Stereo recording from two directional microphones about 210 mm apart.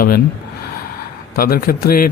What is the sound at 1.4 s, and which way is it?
Speech, 45° left (ahead or behind).